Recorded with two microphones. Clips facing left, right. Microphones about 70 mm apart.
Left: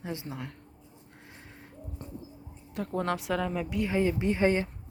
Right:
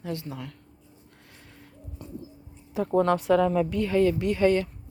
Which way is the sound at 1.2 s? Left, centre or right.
Left.